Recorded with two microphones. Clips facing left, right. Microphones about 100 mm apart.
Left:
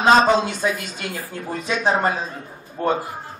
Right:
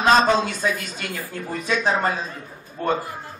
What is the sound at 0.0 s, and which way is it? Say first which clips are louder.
A man's voice: left 2 dB; 20° left (ahead or behind).